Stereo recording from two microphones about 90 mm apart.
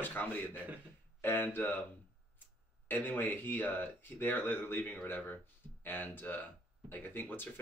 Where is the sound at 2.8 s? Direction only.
20° left (ahead or behind).